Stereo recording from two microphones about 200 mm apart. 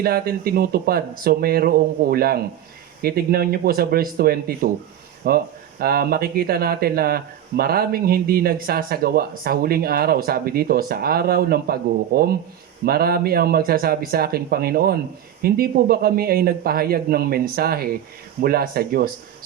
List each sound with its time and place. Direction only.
0.0 s speech: 50° right (ahead or behind)